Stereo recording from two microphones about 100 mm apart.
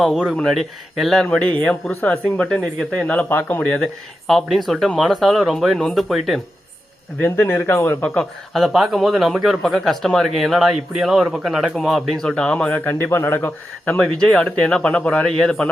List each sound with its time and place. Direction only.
0.3 s a man's voice: centre (ahead or behind)
1.6 s speech: 15° left (ahead or behind)
3.2 s speech: 20° left (ahead or behind)
3.6 s a man's voice: 10° left (ahead or behind)
7.2 s speech: 20° left (ahead or behind)
8.5 s a man's voice: centre (ahead or behind)